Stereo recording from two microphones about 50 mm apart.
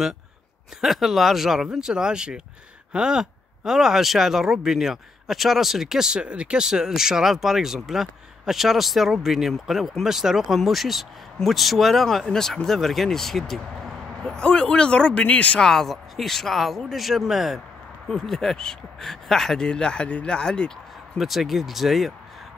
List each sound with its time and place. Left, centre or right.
0.7 s speech: centre
6.2 s speech: right; by 13.9 s centre
14.2 s speech: centre
15.6 s speech: centre
18.0 s speech: centre
21.2 s speech: centre